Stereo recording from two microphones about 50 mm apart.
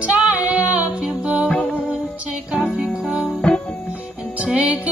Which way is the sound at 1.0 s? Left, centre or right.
Centre.